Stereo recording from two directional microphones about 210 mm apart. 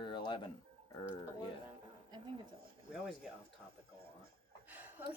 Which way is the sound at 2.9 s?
Centre (ahead or behind).